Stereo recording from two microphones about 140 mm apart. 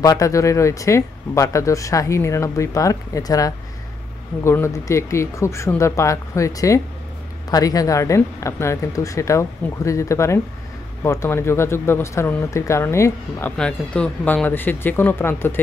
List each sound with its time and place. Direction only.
0.0 s speech: 25° left (ahead or behind)
13.6 s speech: 5° left (ahead or behind)